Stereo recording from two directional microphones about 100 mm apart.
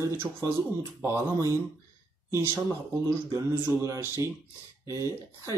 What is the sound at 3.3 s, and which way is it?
Speech, 25° right (ahead or behind).